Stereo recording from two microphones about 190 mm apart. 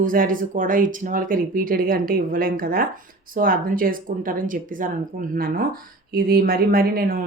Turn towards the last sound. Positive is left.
turn(degrees=-50)  # may be behind; listen again after turning